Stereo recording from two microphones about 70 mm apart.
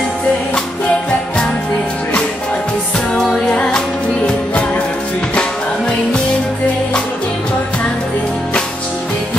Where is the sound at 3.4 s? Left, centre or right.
Centre.